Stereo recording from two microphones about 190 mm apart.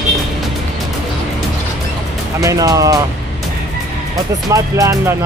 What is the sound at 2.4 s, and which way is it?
Speech, 15° right (ahead or behind).